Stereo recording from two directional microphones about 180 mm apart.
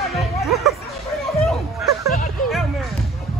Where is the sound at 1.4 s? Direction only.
Centre (ahead or behind).